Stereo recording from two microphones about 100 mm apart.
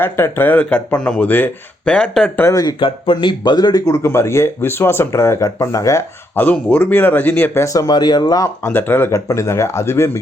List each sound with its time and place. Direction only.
0.0 s speech: 20° left (ahead or behind)
2.4 s speech: 35° left (ahead or behind)
2.6 s speech: 55° left (ahead or behind); by 6.0 s 35° left (ahead or behind)
6.3 s speech: 15° left (ahead or behind); by 8.4 s 40° left (ahead or behind)
8.6 s speech: 20° left (ahead or behind)